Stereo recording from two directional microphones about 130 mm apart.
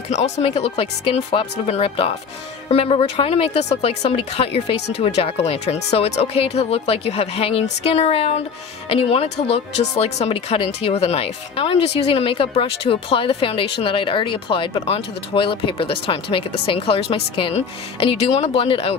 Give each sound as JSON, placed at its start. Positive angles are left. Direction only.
{"t": 0.1, "sound": "speech", "side_deg": 60}
{"t": 18.0, "sound": "speech", "side_deg": 55}